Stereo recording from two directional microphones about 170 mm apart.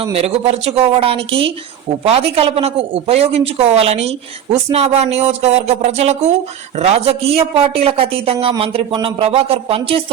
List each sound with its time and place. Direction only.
0.0 s speech: 35° right (ahead or behind)